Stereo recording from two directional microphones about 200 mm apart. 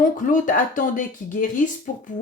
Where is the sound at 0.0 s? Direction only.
40° left (ahead or behind).